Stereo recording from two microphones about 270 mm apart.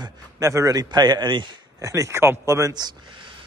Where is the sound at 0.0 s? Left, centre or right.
Centre.